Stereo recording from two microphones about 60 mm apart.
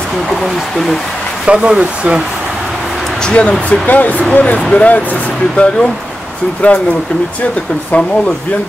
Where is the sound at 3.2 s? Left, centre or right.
Centre.